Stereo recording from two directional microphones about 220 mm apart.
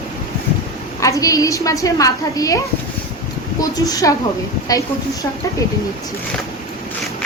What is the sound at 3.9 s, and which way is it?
Speech, 15° left (ahead or behind).